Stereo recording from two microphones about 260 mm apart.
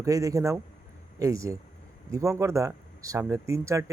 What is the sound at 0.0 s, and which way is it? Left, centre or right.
Speech, centre.